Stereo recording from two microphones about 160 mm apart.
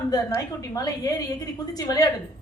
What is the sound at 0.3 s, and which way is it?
A woman's voice, 20° left (ahead or behind).